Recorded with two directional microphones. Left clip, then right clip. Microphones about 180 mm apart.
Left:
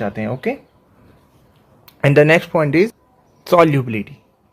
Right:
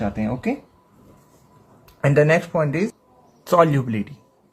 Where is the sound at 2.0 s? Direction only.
40° left (ahead or behind).